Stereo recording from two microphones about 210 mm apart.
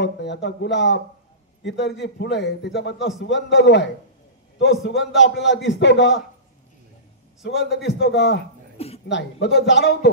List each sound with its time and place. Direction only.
0.0 s a man's voice: 55° left (ahead or behind)
7.4 s a man's voice: 55° left (ahead or behind)
8.7 s a sound: 30° left (ahead or behind)
9.1 s a man's voice: 55° left (ahead or behind)